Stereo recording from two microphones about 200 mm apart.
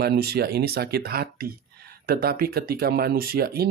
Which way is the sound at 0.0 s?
50° right (ahead or behind).